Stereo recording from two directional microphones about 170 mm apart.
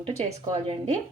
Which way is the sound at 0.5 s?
35° right (ahead or behind).